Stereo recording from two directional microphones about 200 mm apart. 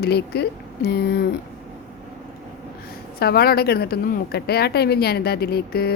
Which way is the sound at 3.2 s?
50° left (ahead or behind).